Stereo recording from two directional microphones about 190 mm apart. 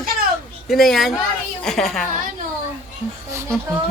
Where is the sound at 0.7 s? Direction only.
Centre (ahead or behind).